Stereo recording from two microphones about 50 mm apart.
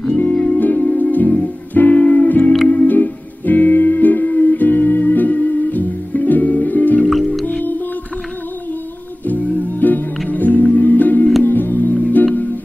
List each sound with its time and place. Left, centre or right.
0.1 s music: left
9.6 s music: left